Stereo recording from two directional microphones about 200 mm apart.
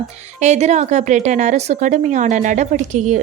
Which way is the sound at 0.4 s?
35° right (ahead or behind).